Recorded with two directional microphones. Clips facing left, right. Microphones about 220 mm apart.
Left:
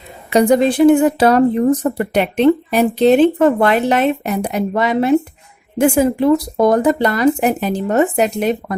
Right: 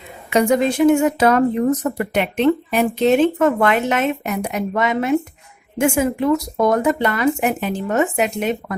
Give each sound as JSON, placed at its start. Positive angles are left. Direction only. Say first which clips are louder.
{"t": 0.3, "sound": "a woman's voice", "louder": "left 4 dB", "side_deg": 35}